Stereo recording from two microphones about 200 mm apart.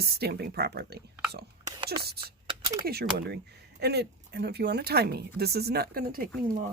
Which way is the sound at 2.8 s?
50° right (ahead or behind).